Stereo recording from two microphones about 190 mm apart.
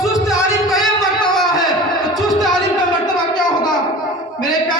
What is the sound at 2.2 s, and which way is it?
Music, centre (ahead or behind).